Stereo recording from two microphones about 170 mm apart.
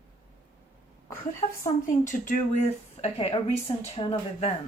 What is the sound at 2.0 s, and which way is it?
Speech, 45° left (ahead or behind).